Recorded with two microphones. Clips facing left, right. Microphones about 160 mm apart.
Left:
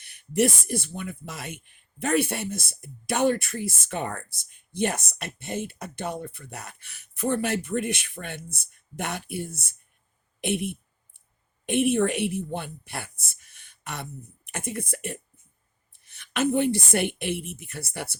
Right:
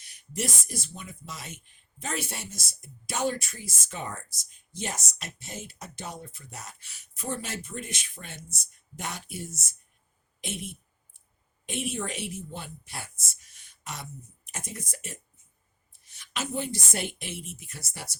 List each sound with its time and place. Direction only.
0.0 s speech: 60° left (ahead or behind)
10.4 s a sound: 65° left (ahead or behind)
11.6 s speech: 60° left (ahead or behind)